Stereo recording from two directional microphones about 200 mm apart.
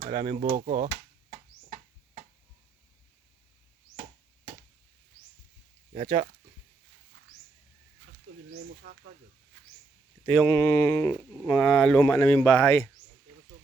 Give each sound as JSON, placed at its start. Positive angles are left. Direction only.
{"t": 0.0, "sound": "speech", "side_deg": -25}
{"t": 5.9, "sound": "speech", "side_deg": -25}
{"t": 10.5, "sound": "speech", "side_deg": 10}
{"t": 11.4, "sound": "speech", "side_deg": 0}